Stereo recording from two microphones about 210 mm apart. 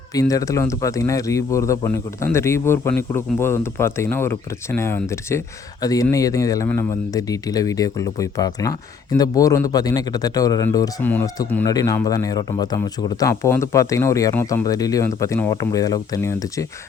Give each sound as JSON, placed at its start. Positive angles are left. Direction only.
{"t": 0.1, "sound": "speech", "side_deg": 15}